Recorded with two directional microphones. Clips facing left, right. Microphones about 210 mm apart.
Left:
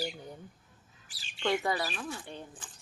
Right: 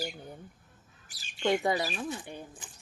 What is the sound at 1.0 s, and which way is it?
Bird, 45° right (ahead or behind).